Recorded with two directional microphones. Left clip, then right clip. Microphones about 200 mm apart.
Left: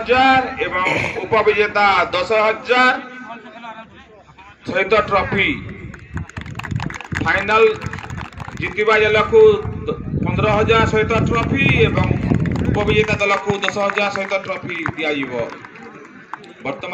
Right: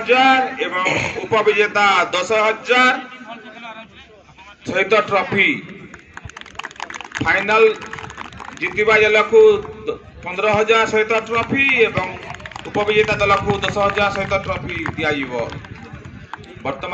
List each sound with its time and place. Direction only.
0.0 s a man's voice: 50° right (ahead or behind)
0.8 s speech: centre (ahead or behind)
1.2 s a man's voice: 55° right (ahead or behind)
4.6 s a man's voice: 50° right (ahead or behind)
6.1 s a sound: 5° left (ahead or behind)
7.2 s a man's voice: 50° right (ahead or behind)
12.3 s a sound: 5° left (ahead or behind)
12.7 s speech: 40° right (ahead or behind)
16.6 s speech: 35° right (ahead or behind)